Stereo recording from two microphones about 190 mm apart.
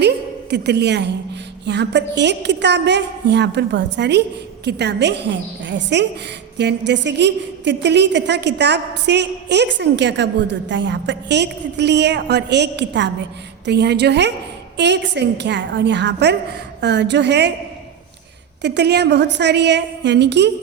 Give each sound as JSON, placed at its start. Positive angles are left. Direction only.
{"t": 0.5, "sound": "a woman's voice", "side_deg": -60}
{"t": 18.6, "sound": "a woman's voice", "side_deg": -65}